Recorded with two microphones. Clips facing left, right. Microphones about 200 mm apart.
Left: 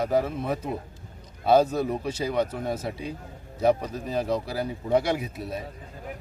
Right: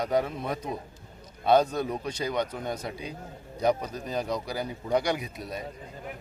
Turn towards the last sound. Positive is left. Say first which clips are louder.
# left 2 dB
turn(degrees=5)  # may be behind; listen again after turning